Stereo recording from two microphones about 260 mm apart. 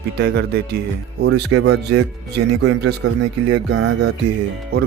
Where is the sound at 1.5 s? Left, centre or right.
Right.